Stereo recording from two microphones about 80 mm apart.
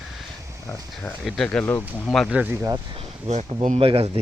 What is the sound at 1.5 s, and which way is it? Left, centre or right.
Speech, centre.